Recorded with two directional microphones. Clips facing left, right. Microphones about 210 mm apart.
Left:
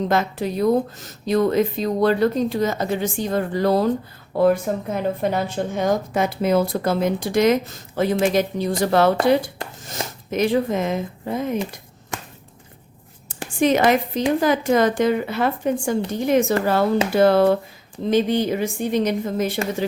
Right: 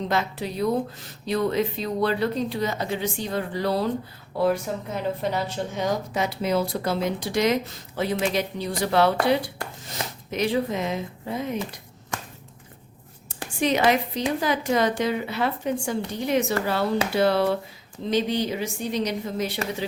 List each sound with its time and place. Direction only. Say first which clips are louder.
0.1 s a woman's voice: left 5 dB; 50° left (ahead or behind)
13.2 s a woman's voice: left 6 dB; 50° left (ahead or behind)